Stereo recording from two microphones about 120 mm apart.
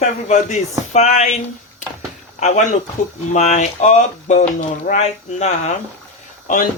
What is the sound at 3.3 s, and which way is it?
Speech, 70° left (ahead or behind).